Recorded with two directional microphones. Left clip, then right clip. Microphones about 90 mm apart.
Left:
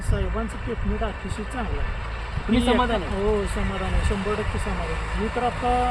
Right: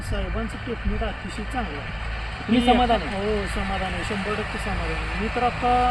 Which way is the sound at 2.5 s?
40° left (ahead or behind).